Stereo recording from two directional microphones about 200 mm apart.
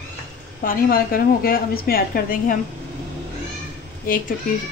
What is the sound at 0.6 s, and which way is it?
A woman's voice, 45° left (ahead or behind).